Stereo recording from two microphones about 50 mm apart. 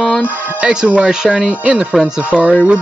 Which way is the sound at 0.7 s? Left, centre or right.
Right.